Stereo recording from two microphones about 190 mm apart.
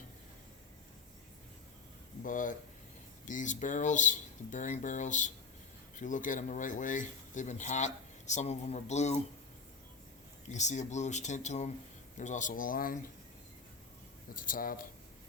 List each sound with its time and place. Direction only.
2.2 s speech: 45° left (ahead or behind)
10.5 s speech: 40° left (ahead or behind)
14.3 s speech: 45° left (ahead or behind)